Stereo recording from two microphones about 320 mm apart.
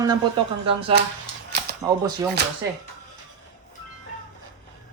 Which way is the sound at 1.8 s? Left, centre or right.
Centre.